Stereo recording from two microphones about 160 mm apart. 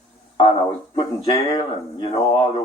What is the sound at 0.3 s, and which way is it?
Speech, 35° left (ahead or behind).